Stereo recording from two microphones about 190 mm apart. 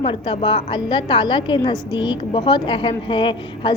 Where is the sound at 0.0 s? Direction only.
25° left (ahead or behind).